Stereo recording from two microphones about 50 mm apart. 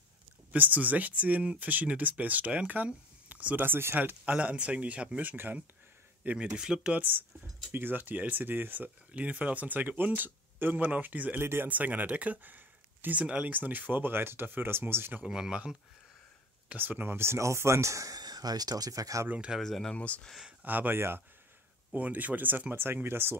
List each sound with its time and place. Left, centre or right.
0.5 s speech: right
3.6 s speech: right
4.4 s speech: right
6.3 s speech: centre
6.9 s speech: right
11.4 s speech: right
11.7 s speech: right
13.2 s speech: right
13.5 s speech: right
15.2 s speech: centre
16.7 s speech: right
19.2 s speech: right
19.6 s speech: centre
20.6 s speech: right